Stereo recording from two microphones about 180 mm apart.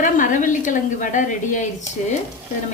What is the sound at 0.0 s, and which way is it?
A woman's voice, 45° left (ahead or behind).